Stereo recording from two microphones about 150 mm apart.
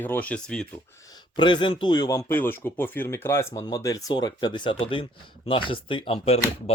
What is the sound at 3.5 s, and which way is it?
Speech, 25° left (ahead or behind).